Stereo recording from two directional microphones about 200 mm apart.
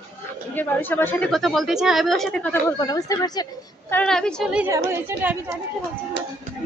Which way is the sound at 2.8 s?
15° left (ahead or behind).